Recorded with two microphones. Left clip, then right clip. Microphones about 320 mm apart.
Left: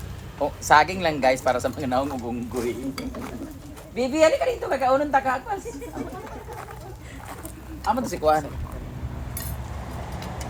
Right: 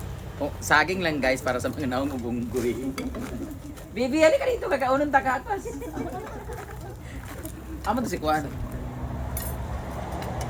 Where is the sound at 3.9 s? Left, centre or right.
Centre.